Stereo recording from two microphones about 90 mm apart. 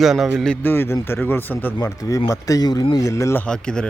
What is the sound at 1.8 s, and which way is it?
Speech, 40° left (ahead or behind).